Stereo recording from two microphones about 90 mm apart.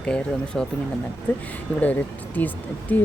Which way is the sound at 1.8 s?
20° left (ahead or behind).